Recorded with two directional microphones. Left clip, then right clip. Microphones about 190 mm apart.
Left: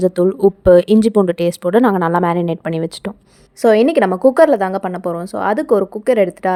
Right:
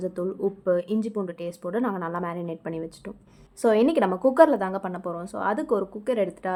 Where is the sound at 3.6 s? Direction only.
30° left (ahead or behind).